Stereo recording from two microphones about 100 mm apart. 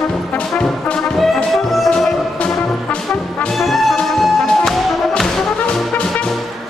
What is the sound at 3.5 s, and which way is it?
Music, centre (ahead or behind).